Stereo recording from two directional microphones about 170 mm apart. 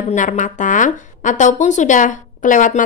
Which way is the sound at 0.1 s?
45° left (ahead or behind).